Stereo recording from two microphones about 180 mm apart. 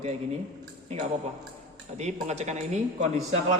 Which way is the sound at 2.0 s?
40° right (ahead or behind).